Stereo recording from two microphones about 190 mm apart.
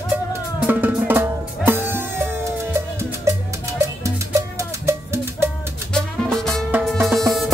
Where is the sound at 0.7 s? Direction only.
10° right (ahead or behind).